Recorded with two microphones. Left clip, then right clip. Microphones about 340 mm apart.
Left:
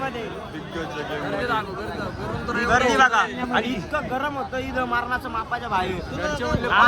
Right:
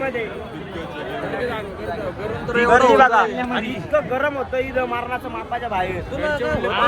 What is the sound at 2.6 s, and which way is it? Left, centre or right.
Speech, centre.